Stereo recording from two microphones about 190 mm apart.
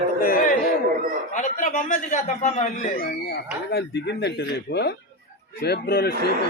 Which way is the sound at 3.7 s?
60° left (ahead or behind).